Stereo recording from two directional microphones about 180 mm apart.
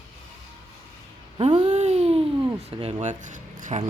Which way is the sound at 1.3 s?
30° right (ahead or behind).